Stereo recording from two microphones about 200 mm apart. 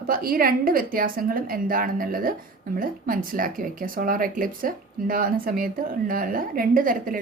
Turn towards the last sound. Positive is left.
turn(degrees=-45)  # may be behind; listen again after turning